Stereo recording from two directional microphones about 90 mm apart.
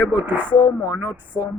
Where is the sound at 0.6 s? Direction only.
60° left (ahead or behind).